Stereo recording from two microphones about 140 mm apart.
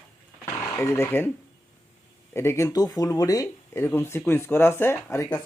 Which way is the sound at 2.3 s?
20° left (ahead or behind).